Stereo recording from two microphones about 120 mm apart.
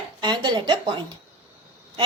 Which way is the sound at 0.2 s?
35° right (ahead or behind).